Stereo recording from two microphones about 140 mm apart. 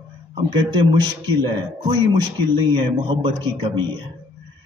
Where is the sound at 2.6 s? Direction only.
35° right (ahead or behind).